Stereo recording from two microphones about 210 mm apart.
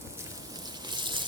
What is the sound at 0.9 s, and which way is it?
Water, 20° right (ahead or behind).